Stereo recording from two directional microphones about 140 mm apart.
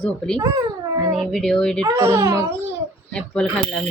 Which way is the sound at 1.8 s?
25° right (ahead or behind).